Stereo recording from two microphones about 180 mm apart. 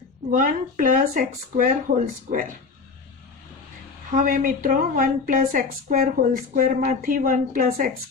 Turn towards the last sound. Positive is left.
turn(degrees=-50)  # may be behind; listen again after turning